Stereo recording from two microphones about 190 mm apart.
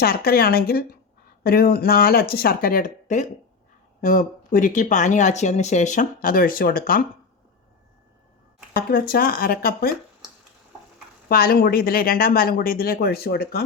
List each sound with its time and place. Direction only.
0.0 s speech: 55° left (ahead or behind)
8.7 s speech: 55° left (ahead or behind)
11.3 s speech: 55° left (ahead or behind)